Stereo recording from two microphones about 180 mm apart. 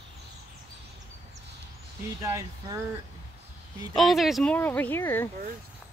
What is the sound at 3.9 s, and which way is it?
Speech, centre (ahead or behind).